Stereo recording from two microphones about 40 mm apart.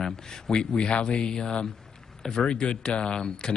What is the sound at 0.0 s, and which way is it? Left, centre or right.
Speech, left.